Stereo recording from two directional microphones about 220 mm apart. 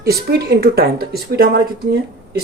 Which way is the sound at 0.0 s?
45° right (ahead or behind).